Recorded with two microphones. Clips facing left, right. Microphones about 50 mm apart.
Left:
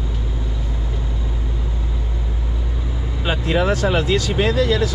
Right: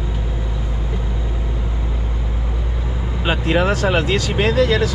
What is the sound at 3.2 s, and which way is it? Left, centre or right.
Speech, right.